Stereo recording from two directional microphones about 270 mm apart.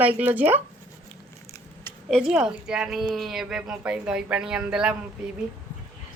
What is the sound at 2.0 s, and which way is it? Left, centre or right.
A woman's voice, centre.